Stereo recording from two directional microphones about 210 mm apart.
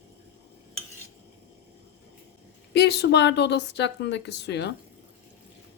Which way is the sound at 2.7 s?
50° left (ahead or behind).